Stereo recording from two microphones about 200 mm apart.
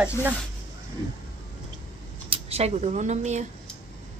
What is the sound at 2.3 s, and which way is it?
Speech, 30° right (ahead or behind).